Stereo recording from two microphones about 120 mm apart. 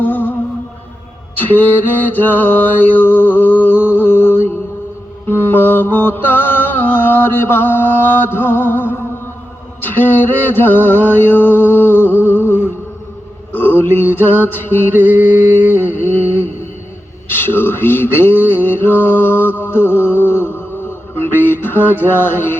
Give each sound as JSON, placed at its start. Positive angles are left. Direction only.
{"t": 0.0, "sound": "music", "side_deg": 15}
{"t": 1.4, "sound": "mantra", "side_deg": 15}
{"t": 9.8, "sound": "male singing", "side_deg": 15}
{"t": 13.5, "sound": "a sound", "side_deg": 15}
{"t": 14.4, "sound": "mantra", "side_deg": 15}
{"t": 14.9, "sound": "a sound", "side_deg": -15}
{"t": 16.0, "sound": "a sound", "side_deg": 15}
{"t": 17.2, "sound": "a man's voice", "side_deg": 15}
{"t": 18.6, "sound": "mantra", "side_deg": 15}
{"t": 21.5, "sound": "music", "side_deg": 15}